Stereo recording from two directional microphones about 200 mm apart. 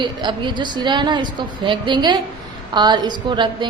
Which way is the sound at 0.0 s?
25° right (ahead or behind).